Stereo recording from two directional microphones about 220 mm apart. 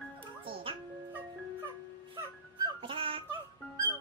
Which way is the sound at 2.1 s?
25° right (ahead or behind).